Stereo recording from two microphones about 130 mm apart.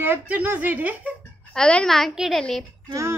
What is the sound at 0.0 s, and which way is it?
Speech, 15° right (ahead or behind).